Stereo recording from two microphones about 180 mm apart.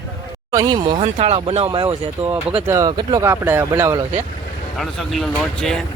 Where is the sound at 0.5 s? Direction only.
20° right (ahead or behind).